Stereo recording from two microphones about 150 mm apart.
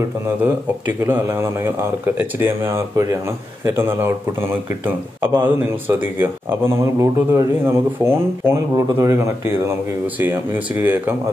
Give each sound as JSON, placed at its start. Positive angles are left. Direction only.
{"t": 0.4, "sound": "speech", "side_deg": -10}